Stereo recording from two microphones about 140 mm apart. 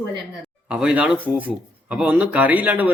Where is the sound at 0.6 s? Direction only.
10° right (ahead or behind).